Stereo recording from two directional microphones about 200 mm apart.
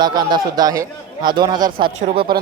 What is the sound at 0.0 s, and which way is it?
A man's voice, 20° right (ahead or behind).